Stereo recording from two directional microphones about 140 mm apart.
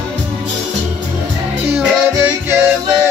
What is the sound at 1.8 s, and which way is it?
Music, 15° right (ahead or behind).